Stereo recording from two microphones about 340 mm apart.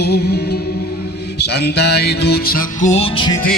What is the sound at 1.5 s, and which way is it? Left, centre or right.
Music, left.